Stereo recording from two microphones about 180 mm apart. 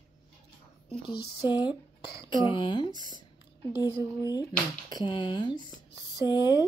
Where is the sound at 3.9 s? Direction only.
15° right (ahead or behind).